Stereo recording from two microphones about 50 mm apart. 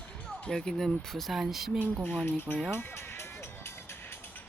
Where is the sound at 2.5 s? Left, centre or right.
Left.